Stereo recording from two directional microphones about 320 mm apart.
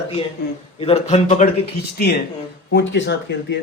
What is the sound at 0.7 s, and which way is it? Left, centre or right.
A man's voice, centre.